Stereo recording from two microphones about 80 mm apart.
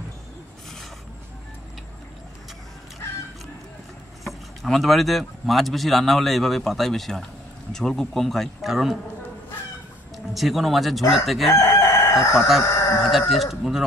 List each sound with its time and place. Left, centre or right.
4.2 s speech: centre
10.1 s speech: centre
11.5 s crowing: left
12.4 s speech: centre
12.6 s chicken: left
13.3 s speech: centre